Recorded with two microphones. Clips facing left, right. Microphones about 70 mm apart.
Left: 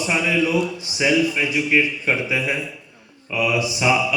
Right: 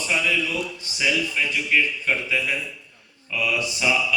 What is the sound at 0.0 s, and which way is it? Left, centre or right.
A man's voice, left.